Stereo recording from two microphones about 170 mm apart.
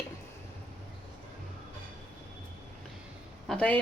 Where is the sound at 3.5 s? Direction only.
5° left (ahead or behind).